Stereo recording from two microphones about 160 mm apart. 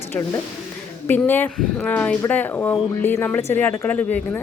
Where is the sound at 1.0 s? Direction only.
10° left (ahead or behind).